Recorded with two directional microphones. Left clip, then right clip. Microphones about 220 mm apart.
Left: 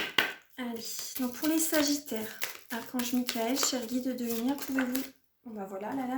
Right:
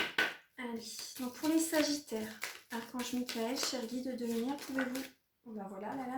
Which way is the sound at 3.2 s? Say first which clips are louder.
Left 6 dB; 50° left (ahead or behind).